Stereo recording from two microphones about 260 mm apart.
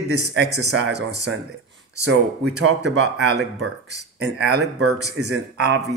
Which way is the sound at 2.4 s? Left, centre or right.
Right.